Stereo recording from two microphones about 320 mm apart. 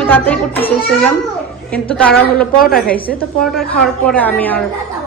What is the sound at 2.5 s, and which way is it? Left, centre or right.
Speech, left.